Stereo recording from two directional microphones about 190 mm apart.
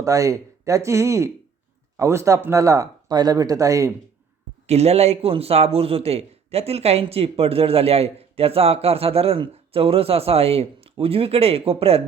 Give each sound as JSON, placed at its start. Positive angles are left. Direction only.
{"t": 0.0, "sound": "speech", "side_deg": -15}
{"t": 4.6, "sound": "a man's voice", "side_deg": -35}